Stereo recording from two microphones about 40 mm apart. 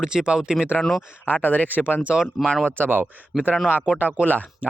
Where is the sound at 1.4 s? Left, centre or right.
Left.